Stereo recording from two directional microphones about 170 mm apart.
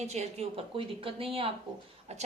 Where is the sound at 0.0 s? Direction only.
40° right (ahead or behind).